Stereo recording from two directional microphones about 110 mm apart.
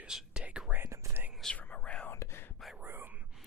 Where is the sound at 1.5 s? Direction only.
15° left (ahead or behind).